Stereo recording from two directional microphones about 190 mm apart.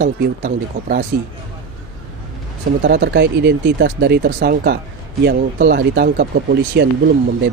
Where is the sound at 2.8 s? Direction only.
60° right (ahead or behind).